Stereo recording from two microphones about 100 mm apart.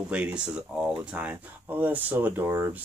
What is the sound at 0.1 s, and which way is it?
Speech, 10° right (ahead or behind).